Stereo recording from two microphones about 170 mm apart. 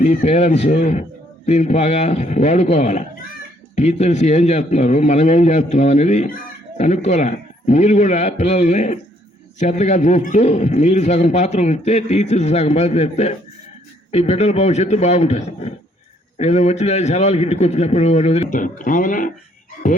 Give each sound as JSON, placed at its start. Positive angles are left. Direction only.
{"t": 0.0, "sound": "a man's voice", "side_deg": 45}